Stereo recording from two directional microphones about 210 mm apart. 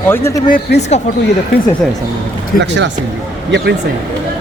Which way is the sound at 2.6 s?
60° right (ahead or behind).